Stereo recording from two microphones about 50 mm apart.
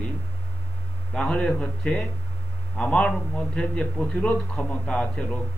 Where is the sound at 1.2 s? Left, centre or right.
Left.